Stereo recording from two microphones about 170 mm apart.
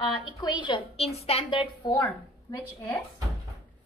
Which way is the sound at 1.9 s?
20° left (ahead or behind).